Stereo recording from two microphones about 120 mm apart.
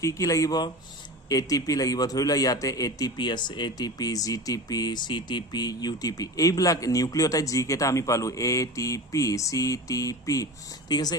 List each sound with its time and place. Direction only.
0.0 s a man's voice: 25° left (ahead or behind)